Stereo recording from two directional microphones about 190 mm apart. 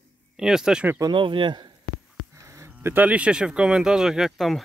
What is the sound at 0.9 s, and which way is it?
Speech, 25° right (ahead or behind).